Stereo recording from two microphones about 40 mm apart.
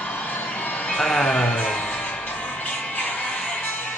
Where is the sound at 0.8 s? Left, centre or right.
Centre.